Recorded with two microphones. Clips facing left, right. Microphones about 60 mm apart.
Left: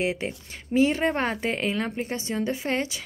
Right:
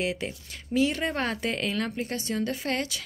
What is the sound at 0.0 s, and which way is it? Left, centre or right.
A woman's voice, left.